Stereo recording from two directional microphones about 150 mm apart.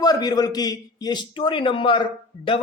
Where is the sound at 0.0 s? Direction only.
25° left (ahead or behind).